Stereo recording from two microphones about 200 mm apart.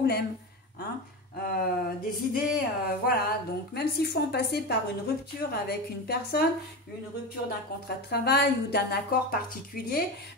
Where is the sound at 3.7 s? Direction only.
55° left (ahead or behind).